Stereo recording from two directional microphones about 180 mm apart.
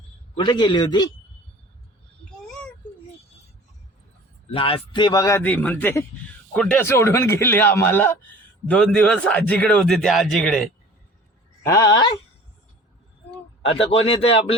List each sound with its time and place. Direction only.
0.3 s a man's voice: 25° left (ahead or behind)
4.5 s a man's voice: 30° left (ahead or behind); by 10.7 s 5° left (ahead or behind)
11.6 s a man's voice: 20° left (ahead or behind)
13.7 s speech: 35° left (ahead or behind)